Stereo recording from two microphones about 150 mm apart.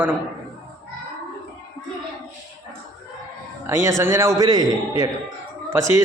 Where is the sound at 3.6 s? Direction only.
20° right (ahead or behind).